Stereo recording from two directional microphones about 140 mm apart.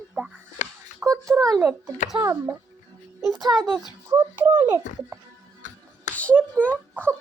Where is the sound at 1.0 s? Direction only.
15° right (ahead or behind).